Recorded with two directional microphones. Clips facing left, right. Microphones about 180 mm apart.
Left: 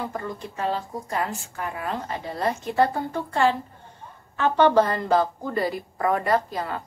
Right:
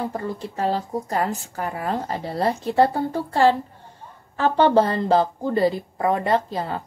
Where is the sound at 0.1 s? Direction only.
30° right (ahead or behind).